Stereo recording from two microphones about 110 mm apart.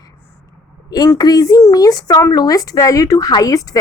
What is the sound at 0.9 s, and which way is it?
Speech, 35° left (ahead or behind).